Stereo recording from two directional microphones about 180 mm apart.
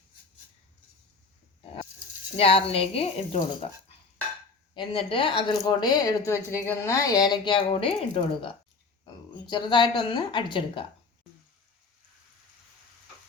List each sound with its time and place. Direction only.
2.3 s speech: 30° left (ahead or behind)
4.7 s a woman's voice: 30° left (ahead or behind)
9.5 s a woman's voice: 25° left (ahead or behind)